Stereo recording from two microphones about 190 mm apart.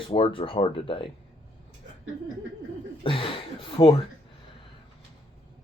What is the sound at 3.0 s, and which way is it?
Speech, 30° left (ahead or behind).